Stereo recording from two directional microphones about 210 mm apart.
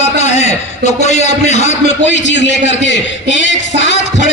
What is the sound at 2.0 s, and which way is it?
A man's voice, 60° left (ahead or behind).